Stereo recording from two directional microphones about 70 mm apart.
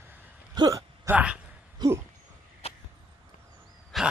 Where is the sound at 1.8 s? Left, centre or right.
Right.